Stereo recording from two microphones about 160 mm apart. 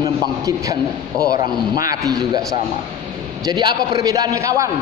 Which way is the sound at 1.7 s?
20° right (ahead or behind).